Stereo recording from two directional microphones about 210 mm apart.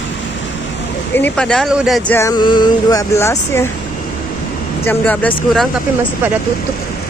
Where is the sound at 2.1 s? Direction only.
15° left (ahead or behind).